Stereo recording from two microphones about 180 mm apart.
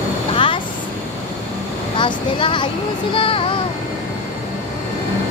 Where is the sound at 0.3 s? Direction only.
30° left (ahead or behind).